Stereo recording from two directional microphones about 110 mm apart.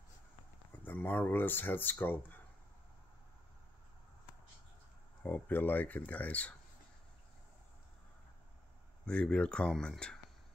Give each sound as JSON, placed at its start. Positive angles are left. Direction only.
{"t": 0.8, "sound": "speech", "side_deg": 20}
{"t": 5.2, "sound": "speech", "side_deg": 15}
{"t": 9.0, "sound": "speech", "side_deg": 10}